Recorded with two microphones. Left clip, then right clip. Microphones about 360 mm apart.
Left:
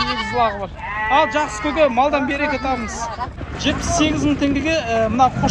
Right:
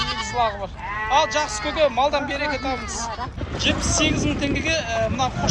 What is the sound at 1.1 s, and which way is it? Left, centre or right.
Speech, centre.